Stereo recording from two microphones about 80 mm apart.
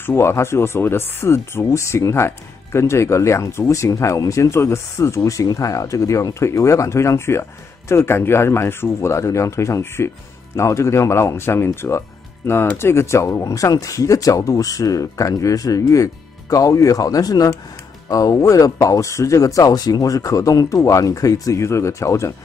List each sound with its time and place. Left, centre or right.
0.0 s speech: left